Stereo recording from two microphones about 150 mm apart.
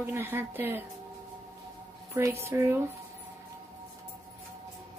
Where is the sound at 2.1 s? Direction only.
20° right (ahead or behind).